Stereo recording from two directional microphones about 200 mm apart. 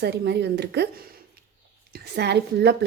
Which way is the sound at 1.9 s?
55° right (ahead or behind).